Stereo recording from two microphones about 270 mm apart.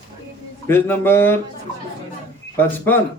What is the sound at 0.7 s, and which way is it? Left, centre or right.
Speech, centre.